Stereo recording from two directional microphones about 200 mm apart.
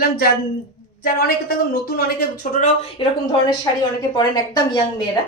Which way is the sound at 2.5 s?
35° left (ahead or behind).